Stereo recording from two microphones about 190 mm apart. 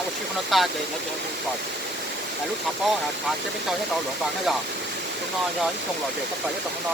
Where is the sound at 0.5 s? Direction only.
Centre (ahead or behind).